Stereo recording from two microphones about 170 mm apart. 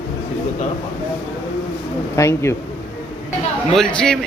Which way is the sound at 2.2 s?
15° left (ahead or behind).